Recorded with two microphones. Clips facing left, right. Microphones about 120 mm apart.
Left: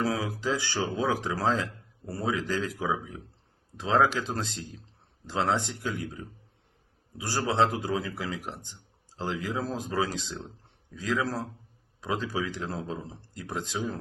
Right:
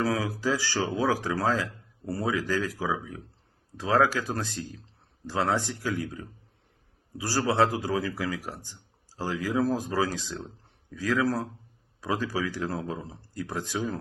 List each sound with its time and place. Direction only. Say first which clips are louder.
0.0 s speech: right 2 dB; 20° left (ahead or behind)